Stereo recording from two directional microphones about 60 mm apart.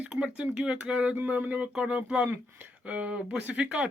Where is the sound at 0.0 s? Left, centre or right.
Centre.